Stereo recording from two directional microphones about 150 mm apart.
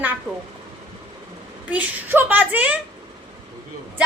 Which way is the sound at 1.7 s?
10° right (ahead or behind).